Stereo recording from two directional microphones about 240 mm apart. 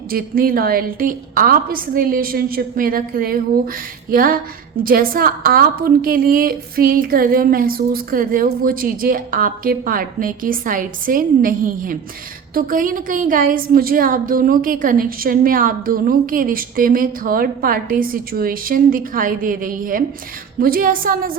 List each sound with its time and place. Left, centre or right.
0.1 s a woman's voice: right